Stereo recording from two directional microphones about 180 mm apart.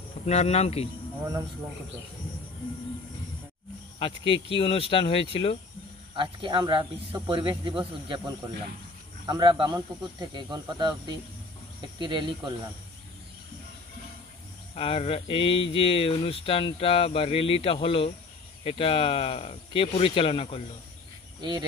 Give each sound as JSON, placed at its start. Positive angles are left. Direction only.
{"t": 0.2, "sound": "speech", "side_deg": 35}
{"t": 4.0, "sound": "speech", "side_deg": 30}
{"t": 6.1, "sound": "speech", "side_deg": -25}
{"t": 9.2, "sound": "speech", "side_deg": -25}
{"t": 14.8, "sound": "speech", "side_deg": 30}
{"t": 21.4, "sound": "speech", "side_deg": -25}